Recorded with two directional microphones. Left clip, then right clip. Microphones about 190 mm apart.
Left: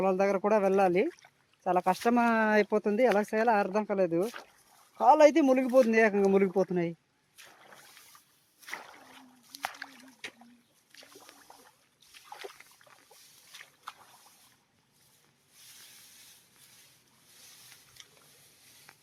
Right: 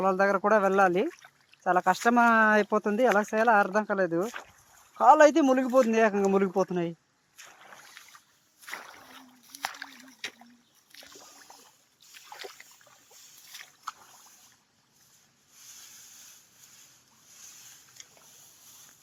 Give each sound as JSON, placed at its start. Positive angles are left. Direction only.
{"t": 0.0, "sound": "speech", "side_deg": -5}
{"t": 4.3, "sound": "speech", "side_deg": 15}
{"t": 4.9, "sound": "speech", "side_deg": -10}
{"t": 7.3, "sound": "boat", "side_deg": 10}
{"t": 8.8, "sound": "boat", "side_deg": -5}
{"t": 9.5, "sound": "rowboat", "side_deg": -10}
{"t": 10.2, "sound": "boat", "side_deg": -25}
{"t": 11.0, "sound": "rowboat", "side_deg": -25}
{"t": 12.1, "sound": "splash", "side_deg": -15}
{"t": 13.5, "sound": "a sound", "side_deg": -30}
{"t": 18.0, "sound": "a sound", "side_deg": 5}